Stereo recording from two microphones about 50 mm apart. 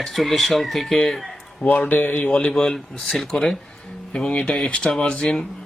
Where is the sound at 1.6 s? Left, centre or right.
Left.